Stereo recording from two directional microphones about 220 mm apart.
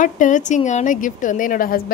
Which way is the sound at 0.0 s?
35° left (ahead or behind).